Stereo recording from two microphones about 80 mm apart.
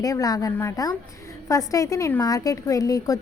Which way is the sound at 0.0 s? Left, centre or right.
Left.